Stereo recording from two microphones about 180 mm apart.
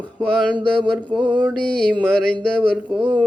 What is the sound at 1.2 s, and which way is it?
Mantra, 25° right (ahead or behind).